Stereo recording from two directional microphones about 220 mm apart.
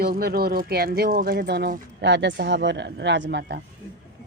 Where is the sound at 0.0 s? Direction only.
45° right (ahead or behind).